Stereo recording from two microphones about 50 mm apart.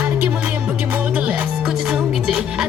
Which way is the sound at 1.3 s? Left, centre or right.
Right.